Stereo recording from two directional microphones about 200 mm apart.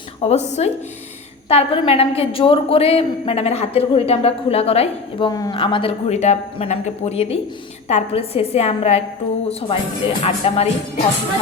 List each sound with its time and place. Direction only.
0.2 s a woman's voice: 35° left (ahead or behind)
5.3 s a woman's voice: 20° left (ahead or behind)